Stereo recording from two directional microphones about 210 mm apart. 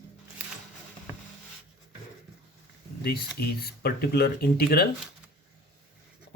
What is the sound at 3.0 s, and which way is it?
Speech, 45° left (ahead or behind).